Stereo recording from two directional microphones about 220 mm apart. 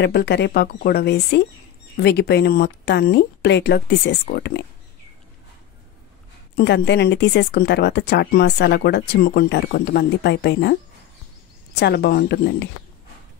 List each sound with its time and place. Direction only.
0.0 s speech: 50° left (ahead or behind)
6.5 s speech: 50° left (ahead or behind)